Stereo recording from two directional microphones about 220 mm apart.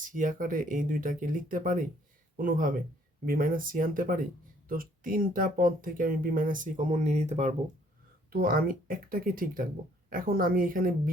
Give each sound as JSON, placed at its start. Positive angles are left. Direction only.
{"t": 0.0, "sound": "speech", "side_deg": -35}
{"t": 8.3, "sound": "speech", "side_deg": -45}